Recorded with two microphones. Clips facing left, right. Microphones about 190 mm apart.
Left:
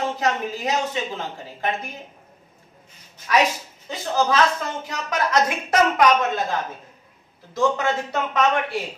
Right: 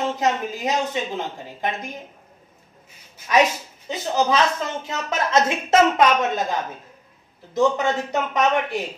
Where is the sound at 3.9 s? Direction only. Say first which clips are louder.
Right 1 dB; 20° right (ahead or behind).